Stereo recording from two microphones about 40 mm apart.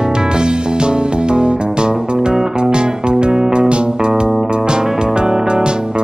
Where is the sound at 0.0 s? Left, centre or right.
Centre.